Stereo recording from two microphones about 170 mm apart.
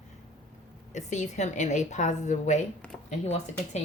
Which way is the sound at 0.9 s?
45° left (ahead or behind).